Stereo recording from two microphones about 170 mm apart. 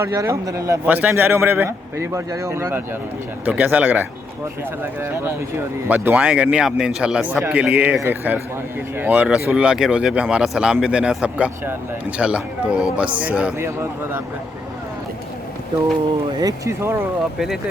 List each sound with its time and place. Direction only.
0.0 s a man's voice: 15° right (ahead or behind)
16.4 s a man's voice: 20° right (ahead or behind)